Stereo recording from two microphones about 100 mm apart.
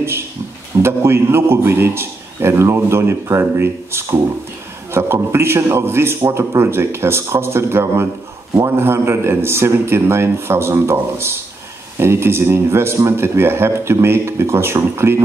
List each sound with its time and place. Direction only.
0.8 s a man's voice: 25° right (ahead or behind)